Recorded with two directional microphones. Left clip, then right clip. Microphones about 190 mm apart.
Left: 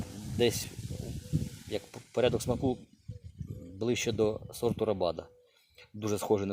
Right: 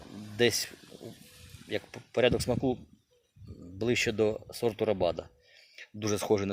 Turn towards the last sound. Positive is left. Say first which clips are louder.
# right 1 dB
turn(degrees=0)  # may be behind; listen again after turning